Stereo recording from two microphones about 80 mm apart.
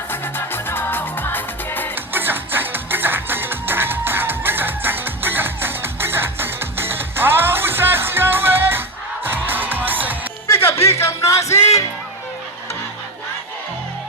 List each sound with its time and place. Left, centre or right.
0.1 s music: left
2.1 s music: right
10.4 s music: left